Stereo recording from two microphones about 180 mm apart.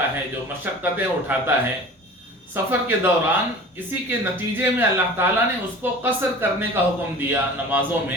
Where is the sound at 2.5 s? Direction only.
10° right (ahead or behind).